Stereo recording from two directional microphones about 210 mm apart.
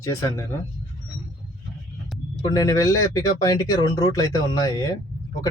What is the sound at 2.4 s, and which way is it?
Speech, 15° left (ahead or behind).